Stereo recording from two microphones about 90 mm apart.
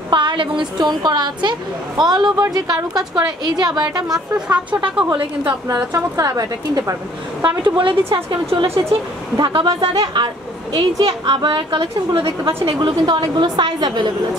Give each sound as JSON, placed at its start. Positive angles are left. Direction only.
{"t": 0.1, "sound": "a woman's voice", "side_deg": -65}
{"t": 4.5, "sound": "speech", "side_deg": -15}
{"t": 5.7, "sound": "a woman's voice", "side_deg": -40}
{"t": 7.4, "sound": "a woman's voice", "side_deg": -60}
{"t": 9.4, "sound": "a woman's voice", "side_deg": -65}
{"t": 9.8, "sound": "a woman's voice", "side_deg": -55}